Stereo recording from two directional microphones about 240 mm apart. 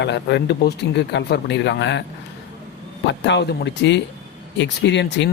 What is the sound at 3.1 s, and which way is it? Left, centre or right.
A man's voice, left.